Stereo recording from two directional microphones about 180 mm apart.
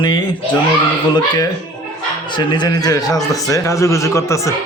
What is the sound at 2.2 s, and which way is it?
A man's voice, 25° left (ahead or behind).